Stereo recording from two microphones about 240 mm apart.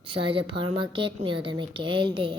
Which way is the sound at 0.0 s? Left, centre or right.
Right.